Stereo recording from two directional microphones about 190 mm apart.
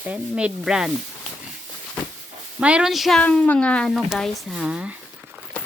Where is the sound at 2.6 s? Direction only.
5° right (ahead or behind).